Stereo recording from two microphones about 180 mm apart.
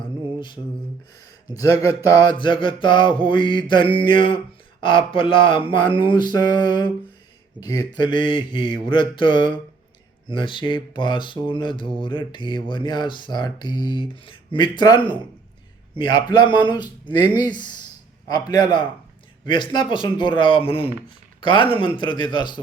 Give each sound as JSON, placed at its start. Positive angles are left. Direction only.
{"t": 0.0, "sound": "mantra", "side_deg": 25}
{"t": 2.0, "sound": "speech", "side_deg": 20}